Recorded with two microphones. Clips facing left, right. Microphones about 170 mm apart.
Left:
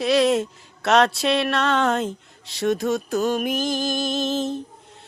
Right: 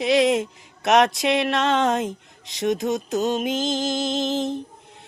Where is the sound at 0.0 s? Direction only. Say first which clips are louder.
Even; 20° right (ahead or behind).